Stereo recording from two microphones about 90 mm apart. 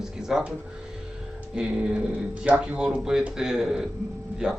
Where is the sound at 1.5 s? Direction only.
10° right (ahead or behind).